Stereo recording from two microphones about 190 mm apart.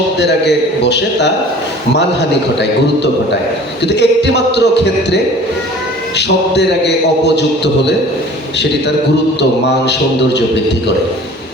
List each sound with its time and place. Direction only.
0.2 s speech: 60° left (ahead or behind)
3.8 s speech: 65° left (ahead or behind)